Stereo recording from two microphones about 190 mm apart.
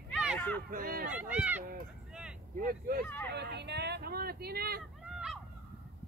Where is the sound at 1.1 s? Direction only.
10° right (ahead or behind).